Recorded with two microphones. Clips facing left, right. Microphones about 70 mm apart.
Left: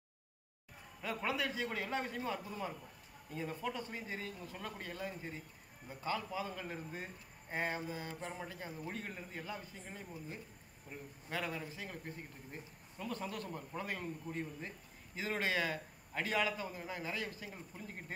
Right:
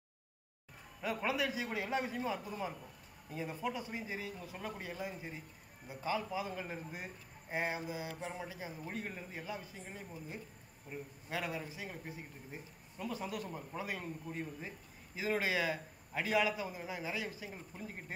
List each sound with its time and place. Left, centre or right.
1.0 s a man's voice: centre